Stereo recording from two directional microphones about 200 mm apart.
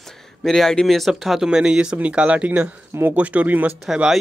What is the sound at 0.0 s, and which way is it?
Speech, centre (ahead or behind).